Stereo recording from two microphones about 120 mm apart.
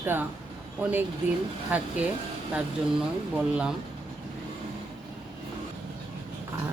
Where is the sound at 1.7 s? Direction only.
15° right (ahead or behind).